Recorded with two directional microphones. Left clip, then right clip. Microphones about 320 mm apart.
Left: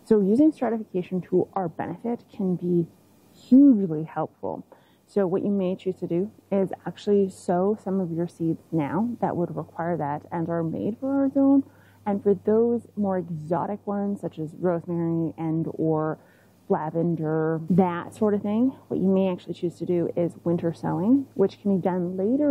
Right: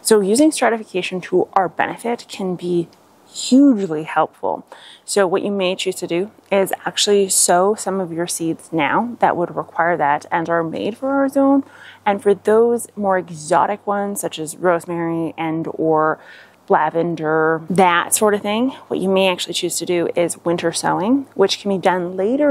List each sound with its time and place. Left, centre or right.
0.1 s a woman's voice: centre
3.7 s speech: centre